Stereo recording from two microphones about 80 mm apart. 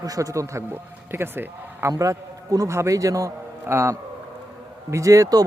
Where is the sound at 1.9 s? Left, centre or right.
Right.